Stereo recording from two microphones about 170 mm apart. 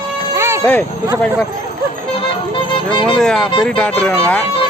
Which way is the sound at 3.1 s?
5° left (ahead or behind).